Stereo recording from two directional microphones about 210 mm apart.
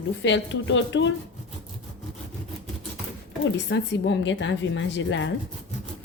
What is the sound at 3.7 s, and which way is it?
A woman's voice, 60° left (ahead or behind).